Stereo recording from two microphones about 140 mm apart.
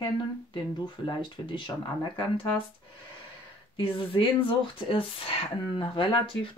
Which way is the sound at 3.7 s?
40° left (ahead or behind).